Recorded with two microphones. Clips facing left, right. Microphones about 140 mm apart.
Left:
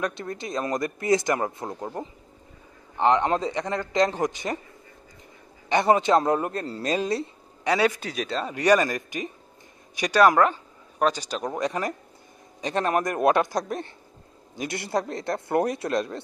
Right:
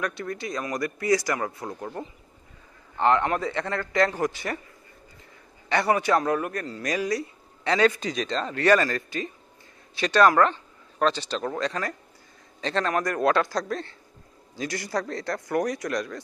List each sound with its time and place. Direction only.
0.0 s speech: 20° left (ahead or behind)
5.7 s speech: 20° left (ahead or behind)
7.6 s a man's voice: 10° left (ahead or behind); by 16.2 s 25° left (ahead or behind)